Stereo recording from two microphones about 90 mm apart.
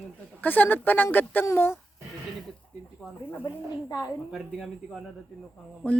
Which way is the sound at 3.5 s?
55° left (ahead or behind).